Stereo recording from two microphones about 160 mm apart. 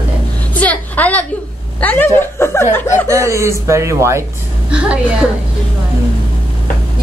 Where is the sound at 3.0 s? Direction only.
20° right (ahead or behind).